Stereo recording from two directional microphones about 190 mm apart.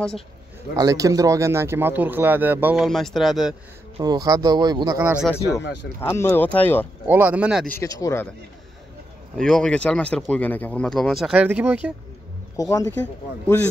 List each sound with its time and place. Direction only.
0.7 s speech: 15° right (ahead or behind); by 3.5 s centre (ahead or behind)
4.0 s speech: 20° right (ahead or behind)
5.9 s speech: 15° left (ahead or behind)
7.1 s speech: 10° right (ahead or behind)
7.6 s speech: 15° left (ahead or behind)
9.4 s speech: 5° left (ahead or behind)
12.5 s speech: 15° left (ahead or behind)